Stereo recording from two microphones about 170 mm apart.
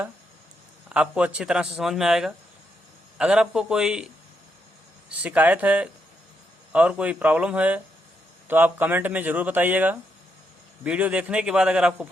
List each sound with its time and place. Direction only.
0.9 s a man's voice: 5° right (ahead or behind)